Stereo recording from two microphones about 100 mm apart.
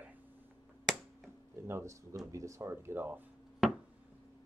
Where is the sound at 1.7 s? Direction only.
30° right (ahead or behind).